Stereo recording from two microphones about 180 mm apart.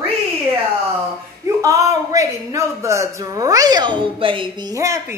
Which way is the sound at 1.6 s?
20° right (ahead or behind).